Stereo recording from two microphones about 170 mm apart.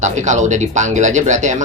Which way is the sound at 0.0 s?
45° right (ahead or behind).